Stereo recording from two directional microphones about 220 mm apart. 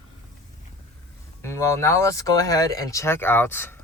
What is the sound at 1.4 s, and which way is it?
Speech, 15° left (ahead or behind).